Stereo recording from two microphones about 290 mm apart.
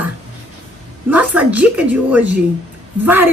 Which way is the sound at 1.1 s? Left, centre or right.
Centre.